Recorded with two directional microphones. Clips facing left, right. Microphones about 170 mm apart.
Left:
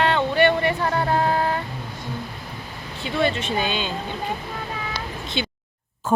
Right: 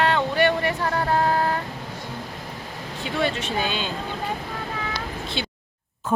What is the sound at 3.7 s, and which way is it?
Speech, 45° right (ahead or behind).